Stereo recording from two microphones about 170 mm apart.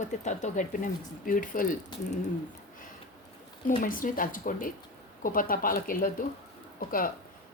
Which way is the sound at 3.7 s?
55° left (ahead or behind).